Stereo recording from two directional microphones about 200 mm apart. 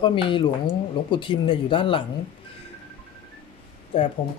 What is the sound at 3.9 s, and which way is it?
Speech, 25° left (ahead or behind).